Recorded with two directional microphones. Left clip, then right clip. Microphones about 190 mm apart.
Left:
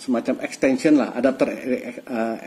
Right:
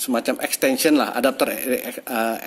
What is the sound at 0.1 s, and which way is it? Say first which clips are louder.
Speech: right 1 dB; 20° right (ahead or behind).